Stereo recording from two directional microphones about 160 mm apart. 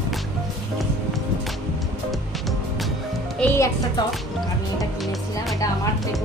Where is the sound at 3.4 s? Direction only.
15° left (ahead or behind).